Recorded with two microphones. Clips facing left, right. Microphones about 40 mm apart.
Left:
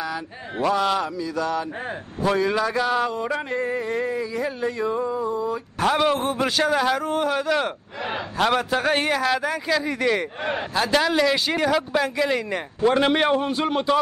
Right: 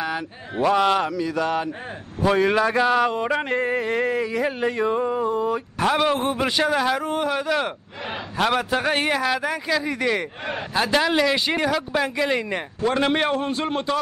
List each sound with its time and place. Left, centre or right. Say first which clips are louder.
0.7 s mantra: right 3 dB; right
2.8 s speech: right 4 dB; right
3.4 s a sound: right 2 dB; right
5.8 s a man's voice: left 1 dB; centre
6.1 s speech: right 1 dB; centre
6.4 s a man's voice: left 1 dB; centre
12.8 s a man's voice: left 2 dB; centre